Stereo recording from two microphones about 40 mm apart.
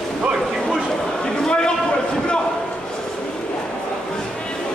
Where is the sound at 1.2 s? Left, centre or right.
Centre.